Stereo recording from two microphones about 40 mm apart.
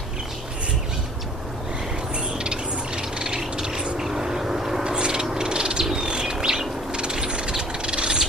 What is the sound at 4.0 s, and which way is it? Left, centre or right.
Vehicle, centre.